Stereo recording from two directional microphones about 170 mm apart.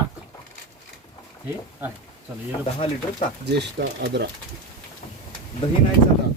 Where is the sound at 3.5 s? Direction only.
90° right.